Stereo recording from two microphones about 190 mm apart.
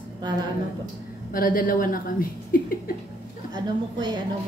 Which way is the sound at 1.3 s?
45° left (ahead or behind).